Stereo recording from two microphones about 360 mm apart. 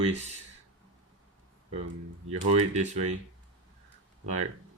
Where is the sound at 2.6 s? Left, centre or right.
Centre.